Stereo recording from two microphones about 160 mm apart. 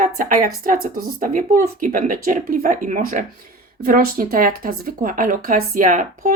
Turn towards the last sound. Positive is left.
turn(degrees=-55)  # may be behind; listen again after turning